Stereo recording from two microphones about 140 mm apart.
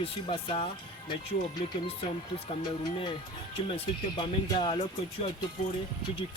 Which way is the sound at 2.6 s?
35° left (ahead or behind).